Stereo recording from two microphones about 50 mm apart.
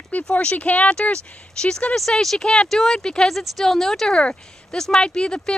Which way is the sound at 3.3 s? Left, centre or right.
Centre.